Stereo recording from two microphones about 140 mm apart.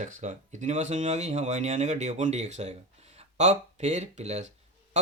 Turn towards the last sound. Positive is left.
turn(degrees=-50)  # may be behind; listen again after turning